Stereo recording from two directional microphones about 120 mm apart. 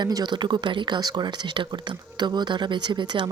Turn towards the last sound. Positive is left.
turn(degrees=-40)  # may be behind; listen again after turning